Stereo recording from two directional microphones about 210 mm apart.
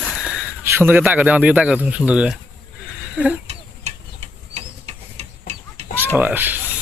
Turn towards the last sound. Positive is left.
turn(degrees=-10)  # may be behind; listen again after turning